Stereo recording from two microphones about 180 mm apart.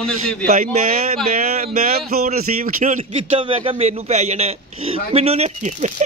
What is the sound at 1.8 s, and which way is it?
Speech, 55° right (ahead or behind).